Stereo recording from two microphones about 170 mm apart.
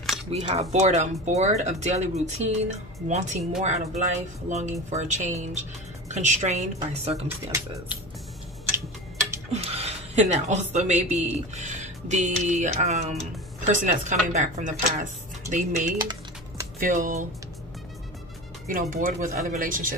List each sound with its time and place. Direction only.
0.5 s speech: 40° right (ahead or behind)
7.2 s speech: 15° right (ahead or behind)
9.5 s speech: 35° right (ahead or behind)
16.0 s typing: 25° right (ahead or behind)
16.8 s speech: 50° right (ahead or behind)
18.7 s speech: 55° right (ahead or behind)